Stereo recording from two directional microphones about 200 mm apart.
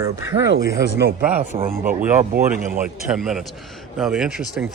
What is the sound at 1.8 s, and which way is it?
Speech, 45° right (ahead or behind).